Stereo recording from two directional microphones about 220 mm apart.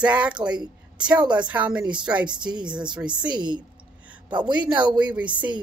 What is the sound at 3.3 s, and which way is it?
A woman's voice, 20° right (ahead or behind).